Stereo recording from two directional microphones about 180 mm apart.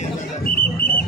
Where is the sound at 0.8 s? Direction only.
60° left (ahead or behind).